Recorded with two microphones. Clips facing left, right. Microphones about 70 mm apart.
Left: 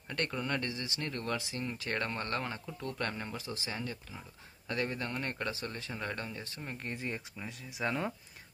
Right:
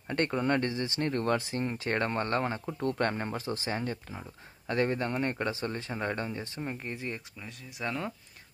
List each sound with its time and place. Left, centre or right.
0.1 s speech: right
6.8 s speech: centre